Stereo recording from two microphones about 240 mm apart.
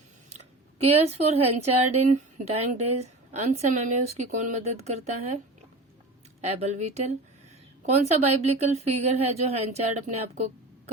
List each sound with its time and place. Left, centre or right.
0.3 s speech: right
6.4 s speech: right